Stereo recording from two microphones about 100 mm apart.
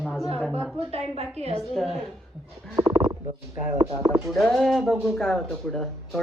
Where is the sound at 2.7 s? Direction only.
40° right (ahead or behind).